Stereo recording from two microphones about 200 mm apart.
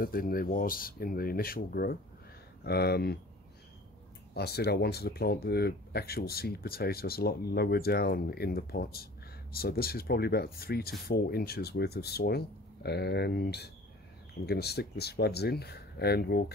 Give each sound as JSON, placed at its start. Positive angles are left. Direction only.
{"t": 0.0, "sound": "speech", "side_deg": 45}
{"t": 4.3, "sound": "speech", "side_deg": 55}